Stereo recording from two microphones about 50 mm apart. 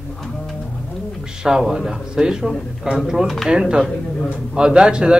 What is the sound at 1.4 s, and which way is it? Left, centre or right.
Speech, centre.